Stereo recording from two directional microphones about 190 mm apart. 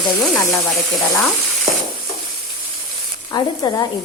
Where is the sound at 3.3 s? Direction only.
20° left (ahead or behind).